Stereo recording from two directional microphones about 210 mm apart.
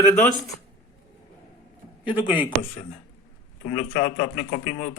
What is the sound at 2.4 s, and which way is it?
Speech, 25° left (ahead or behind).